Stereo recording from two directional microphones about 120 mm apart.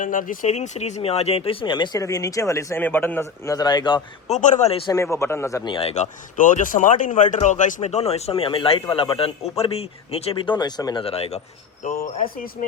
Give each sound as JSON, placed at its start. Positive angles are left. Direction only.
{"t": 0.0, "sound": "speech", "side_deg": 90}
{"t": 2.8, "sound": "a man's voice", "side_deg": 15}
{"t": 4.3, "sound": "speech", "side_deg": 90}
{"t": 4.9, "sound": "a man's voice", "side_deg": 25}
{"t": 5.6, "sound": "speech", "side_deg": 45}
{"t": 5.9, "sound": "speech", "side_deg": 85}
{"t": 10.4, "sound": "speech", "side_deg": 40}
{"t": 11.0, "sound": "speech", "side_deg": 55}
{"t": 11.8, "sound": "speech", "side_deg": 90}